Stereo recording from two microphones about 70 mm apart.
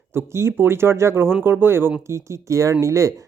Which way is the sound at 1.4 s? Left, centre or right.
Right.